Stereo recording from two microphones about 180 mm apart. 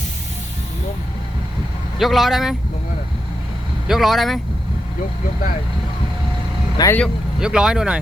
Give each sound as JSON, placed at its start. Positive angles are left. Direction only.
{"t": 2.0, "sound": "speech", "side_deg": 0}
{"t": 3.8, "sound": "speech", "side_deg": 0}
{"t": 6.7, "sound": "speech", "side_deg": 15}
{"t": 7.0, "sound": "speech", "side_deg": -5}